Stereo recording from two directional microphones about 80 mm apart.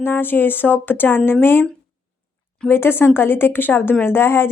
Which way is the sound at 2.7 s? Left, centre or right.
Left.